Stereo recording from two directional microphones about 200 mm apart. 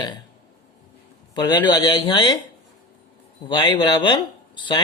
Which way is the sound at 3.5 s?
25° left (ahead or behind).